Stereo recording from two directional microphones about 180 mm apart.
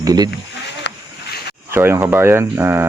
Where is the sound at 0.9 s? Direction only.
75° left (ahead or behind).